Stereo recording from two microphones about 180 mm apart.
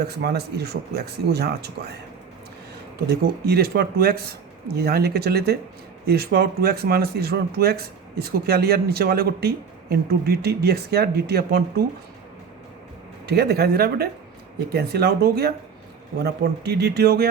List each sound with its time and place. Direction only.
0.0 s speech: 65° right (ahead or behind)
3.1 s speech: 60° right (ahead or behind)
13.2 s speech: 65° right (ahead or behind)